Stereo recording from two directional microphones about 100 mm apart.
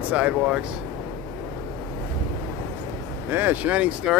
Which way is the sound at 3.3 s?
20° right (ahead or behind).